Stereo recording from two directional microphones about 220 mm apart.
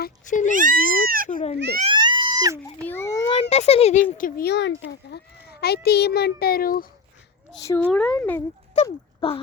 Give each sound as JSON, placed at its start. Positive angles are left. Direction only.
{"t": 0.0, "sound": "speech", "side_deg": 35}
{"t": 0.5, "sound": "cat", "side_deg": -40}
{"t": 1.9, "sound": "a sound", "side_deg": -20}
{"t": 2.8, "sound": "baby cry", "side_deg": 10}
{"t": 3.5, "sound": "speech", "side_deg": 30}
{"t": 4.2, "sound": "a child's voice", "side_deg": 45}
{"t": 7.6, "sound": "a woman's voice", "side_deg": 10}
{"t": 8.7, "sound": "speech", "side_deg": 25}